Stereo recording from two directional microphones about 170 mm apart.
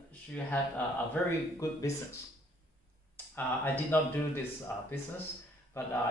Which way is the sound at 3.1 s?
10° left (ahead or behind).